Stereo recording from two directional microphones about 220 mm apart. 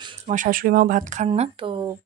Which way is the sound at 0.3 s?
40° right (ahead or behind).